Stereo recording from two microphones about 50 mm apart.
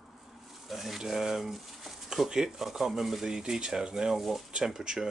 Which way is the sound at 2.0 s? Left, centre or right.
Centre.